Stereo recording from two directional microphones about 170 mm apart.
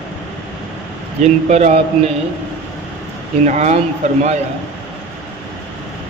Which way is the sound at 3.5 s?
40° right (ahead or behind).